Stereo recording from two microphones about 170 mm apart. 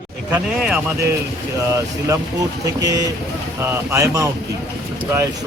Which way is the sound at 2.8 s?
20° right (ahead or behind).